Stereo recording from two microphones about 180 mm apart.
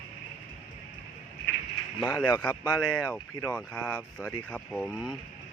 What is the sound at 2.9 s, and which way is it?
Speech, 5° left (ahead or behind).